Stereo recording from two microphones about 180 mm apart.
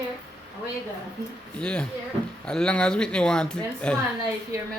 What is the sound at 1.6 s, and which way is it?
Speech, 5° left (ahead or behind).